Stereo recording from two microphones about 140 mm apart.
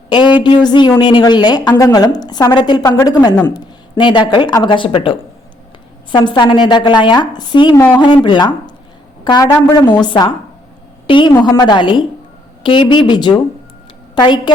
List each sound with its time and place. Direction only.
0.1 s a woman's voice: 35° left (ahead or behind)
11.0 s a sound: 35° left (ahead or behind)
11.3 s a woman's voice: 30° left (ahead or behind)